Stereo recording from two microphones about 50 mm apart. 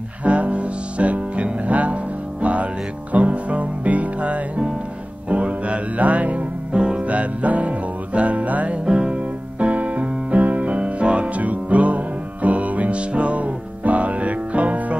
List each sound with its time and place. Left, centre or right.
0.2 s music: right
6.8 s music: centre
7.1 s music: right
8.8 s music: centre